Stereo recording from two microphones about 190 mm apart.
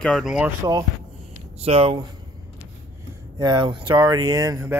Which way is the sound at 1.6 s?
30° right (ahead or behind).